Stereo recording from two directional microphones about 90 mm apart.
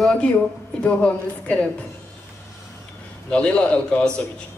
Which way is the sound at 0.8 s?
15° left (ahead or behind).